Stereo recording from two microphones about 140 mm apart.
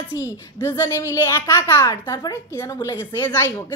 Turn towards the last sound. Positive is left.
turn(degrees=15)  # may be behind; listen again after turning